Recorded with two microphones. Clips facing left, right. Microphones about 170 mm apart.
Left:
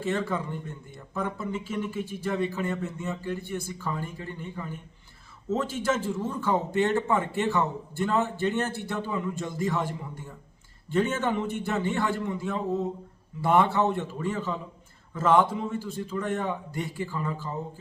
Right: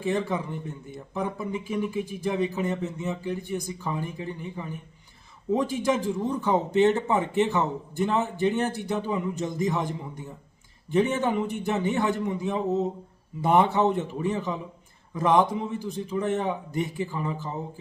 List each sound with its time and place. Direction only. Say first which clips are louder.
0.0 s a man's voice: right 2 dB; 15° right (ahead or behind)